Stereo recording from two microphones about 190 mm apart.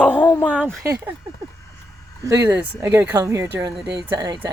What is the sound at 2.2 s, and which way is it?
Speech, 15° right (ahead or behind).